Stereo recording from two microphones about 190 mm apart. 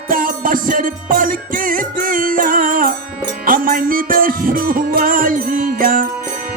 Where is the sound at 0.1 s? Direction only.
45° right (ahead or behind).